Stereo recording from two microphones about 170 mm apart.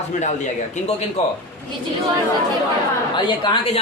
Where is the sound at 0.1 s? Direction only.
45° left (ahead or behind).